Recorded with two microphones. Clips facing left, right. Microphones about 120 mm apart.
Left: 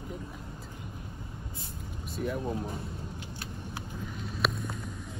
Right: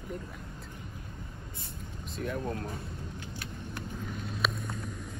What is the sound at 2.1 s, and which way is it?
Speech, 5° left (ahead or behind).